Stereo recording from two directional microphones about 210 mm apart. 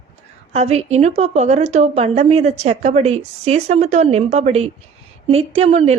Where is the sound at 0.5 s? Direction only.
30° right (ahead or behind).